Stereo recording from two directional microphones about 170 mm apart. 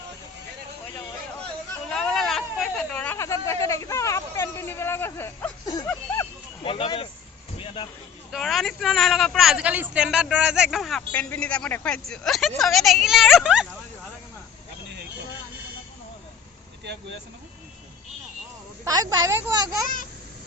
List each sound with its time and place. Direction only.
1.9 s hubbub: 5° left (ahead or behind)
5.6 s a sound: 15° left (ahead or behind)
6.6 s a sound: 30° left (ahead or behind)
8.3 s a man's voice: centre (ahead or behind)
16.8 s speech: 85° right
18.9 s speech: 20° right (ahead or behind)